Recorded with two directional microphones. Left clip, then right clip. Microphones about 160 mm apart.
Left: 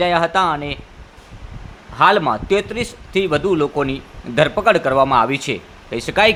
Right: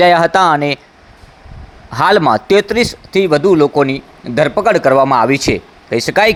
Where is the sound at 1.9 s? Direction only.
45° right (ahead or behind).